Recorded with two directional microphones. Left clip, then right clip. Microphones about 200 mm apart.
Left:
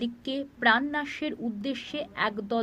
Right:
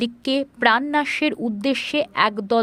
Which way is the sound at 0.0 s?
60° right (ahead or behind).